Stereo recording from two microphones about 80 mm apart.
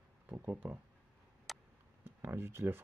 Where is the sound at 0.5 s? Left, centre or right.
Centre.